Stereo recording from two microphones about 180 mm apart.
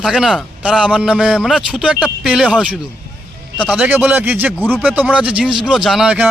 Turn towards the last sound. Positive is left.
turn(degrees=-10)  # may be behind; listen again after turning